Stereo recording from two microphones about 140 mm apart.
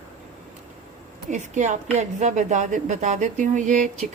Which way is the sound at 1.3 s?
60° right (ahead or behind).